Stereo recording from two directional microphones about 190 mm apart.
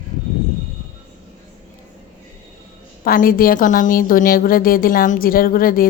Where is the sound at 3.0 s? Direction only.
50° left (ahead or behind).